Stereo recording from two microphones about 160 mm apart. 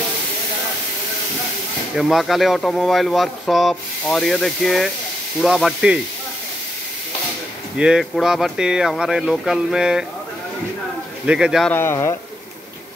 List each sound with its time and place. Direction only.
2.0 s speech: centre (ahead or behind)
7.7 s speech: 5° right (ahead or behind)
11.2 s speech: 5° right (ahead or behind)
11.7 s speech: 15° left (ahead or behind)